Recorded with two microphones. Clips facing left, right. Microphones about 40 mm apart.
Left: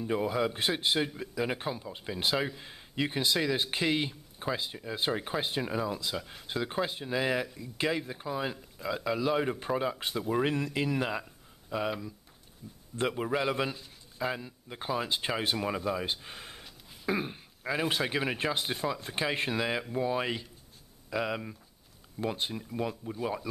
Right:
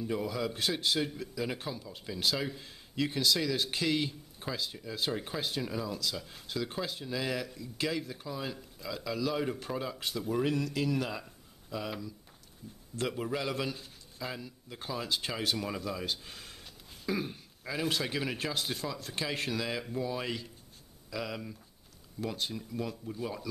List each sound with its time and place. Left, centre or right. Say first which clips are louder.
0.0 s speech: left 4 dB; left
12.9 s speech: left 4 dB; left